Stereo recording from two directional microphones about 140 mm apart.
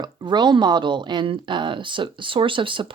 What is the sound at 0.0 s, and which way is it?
Speech, 30° right (ahead or behind).